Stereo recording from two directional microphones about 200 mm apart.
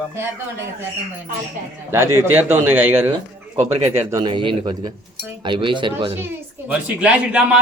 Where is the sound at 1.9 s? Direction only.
10° right (ahead or behind).